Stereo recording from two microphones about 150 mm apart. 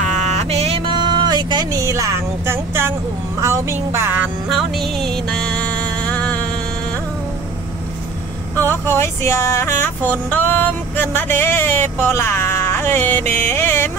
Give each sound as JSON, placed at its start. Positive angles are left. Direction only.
{"t": 0.0, "sound": "a sound", "side_deg": -50}
{"t": 4.5, "sound": "music", "side_deg": 0}
{"t": 8.5, "sound": "speech", "side_deg": 15}
{"t": 13.3, "sound": "music", "side_deg": 15}